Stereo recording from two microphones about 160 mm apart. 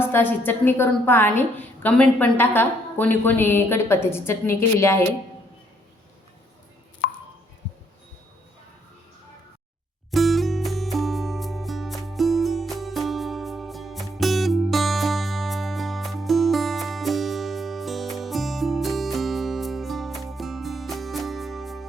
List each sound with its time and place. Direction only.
0.0 s a woman's voice: 15° left (ahead or behind)
7.0 s a sound: 75° left (ahead or behind)
10.1 s music: centre (ahead or behind)